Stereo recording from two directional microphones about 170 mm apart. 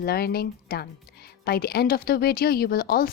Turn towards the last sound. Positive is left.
turn(degrees=60)  # may be behind; listen again after turning